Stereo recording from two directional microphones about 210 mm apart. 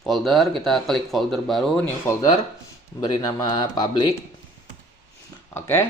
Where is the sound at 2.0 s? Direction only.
15° left (ahead or behind).